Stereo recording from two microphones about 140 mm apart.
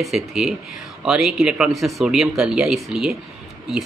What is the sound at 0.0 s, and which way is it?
Speech, 5° right (ahead or behind).